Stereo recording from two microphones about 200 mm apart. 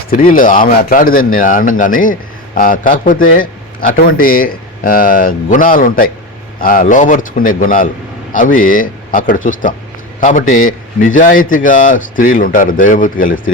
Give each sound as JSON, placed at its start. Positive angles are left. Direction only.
{"t": 0.1, "sound": "a man's voice", "side_deg": 45}